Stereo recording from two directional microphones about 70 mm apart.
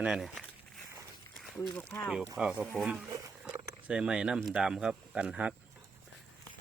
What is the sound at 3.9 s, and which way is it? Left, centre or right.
Speech, centre.